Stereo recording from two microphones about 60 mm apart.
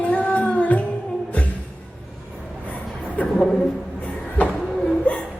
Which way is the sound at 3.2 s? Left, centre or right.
Left.